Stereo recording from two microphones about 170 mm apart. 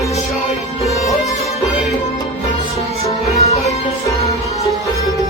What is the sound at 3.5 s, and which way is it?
Music, 40° left (ahead or behind).